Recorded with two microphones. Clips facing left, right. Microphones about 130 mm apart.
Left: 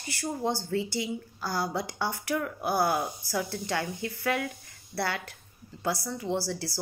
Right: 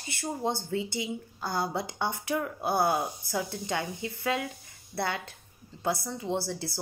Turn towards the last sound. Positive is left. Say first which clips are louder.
# left 1 dB
turn(degrees=-20)  # may be behind; listen again after turning